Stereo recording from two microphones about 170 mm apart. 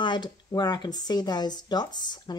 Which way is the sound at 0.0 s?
25° left (ahead or behind).